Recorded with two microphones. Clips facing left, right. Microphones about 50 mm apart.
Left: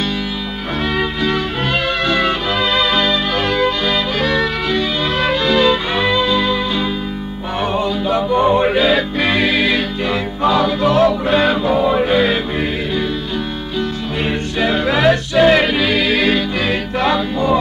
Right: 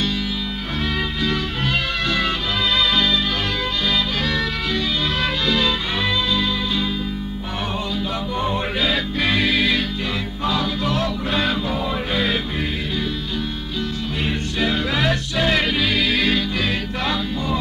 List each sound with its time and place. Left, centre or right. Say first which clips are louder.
0.9 s music: left 6 dB; left
7.7 s music: left 9 dB; left
14.6 s music: left 6 dB; left